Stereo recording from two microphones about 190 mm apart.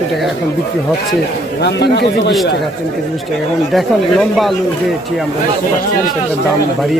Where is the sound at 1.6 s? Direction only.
60° left (ahead or behind).